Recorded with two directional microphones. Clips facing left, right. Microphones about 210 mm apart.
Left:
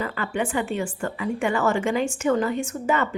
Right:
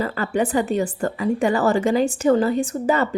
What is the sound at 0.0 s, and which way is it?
A woman's voice, 40° right (ahead or behind).